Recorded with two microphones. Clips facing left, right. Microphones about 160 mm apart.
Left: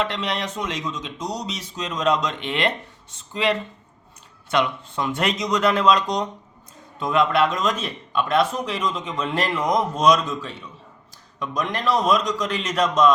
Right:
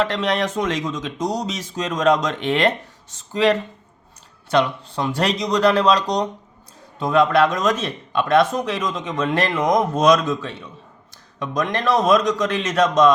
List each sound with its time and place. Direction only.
0.0 s speech: 45° right (ahead or behind)
11.5 s speech: 50° right (ahead or behind)